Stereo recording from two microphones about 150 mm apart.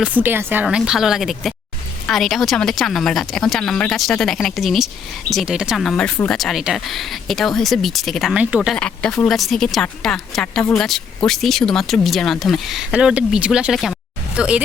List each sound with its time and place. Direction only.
0.0 s speech: 10° right (ahead or behind)
8.7 s speech: 5° left (ahead or behind)